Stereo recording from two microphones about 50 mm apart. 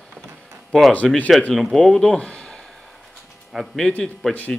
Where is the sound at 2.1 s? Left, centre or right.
Left.